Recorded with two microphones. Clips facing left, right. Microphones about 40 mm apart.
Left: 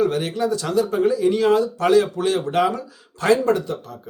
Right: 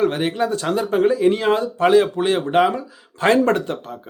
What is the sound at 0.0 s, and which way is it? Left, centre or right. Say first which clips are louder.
Speech: right 1 dB; right.